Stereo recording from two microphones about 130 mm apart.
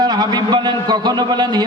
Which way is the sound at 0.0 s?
30° right (ahead or behind).